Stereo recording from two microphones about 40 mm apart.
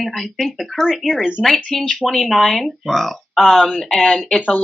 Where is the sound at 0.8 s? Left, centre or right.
Centre.